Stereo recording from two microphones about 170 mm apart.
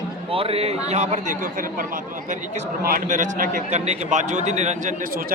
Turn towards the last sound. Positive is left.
turn(degrees=-45)  # may be behind; listen again after turning